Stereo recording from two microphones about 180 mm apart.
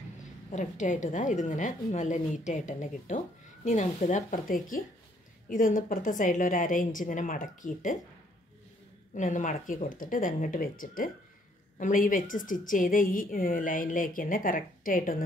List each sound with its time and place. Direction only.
0.2 s a woman's voice: 40° left (ahead or behind)
9.1 s a woman's voice: 45° left (ahead or behind)